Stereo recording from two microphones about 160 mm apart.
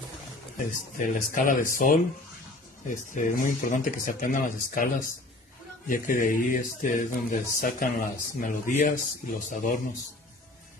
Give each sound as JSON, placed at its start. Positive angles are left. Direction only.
{"t": 0.6, "sound": "speech", "side_deg": 55}